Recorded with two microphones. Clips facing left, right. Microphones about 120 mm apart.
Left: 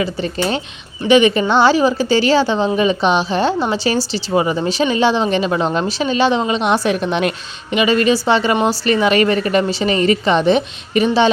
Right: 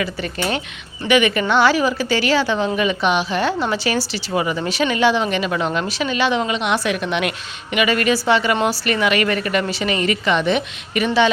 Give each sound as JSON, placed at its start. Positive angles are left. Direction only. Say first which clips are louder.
{"t": 0.0, "sound": "a woman's voice", "louder": "left 4 dB", "side_deg": 30}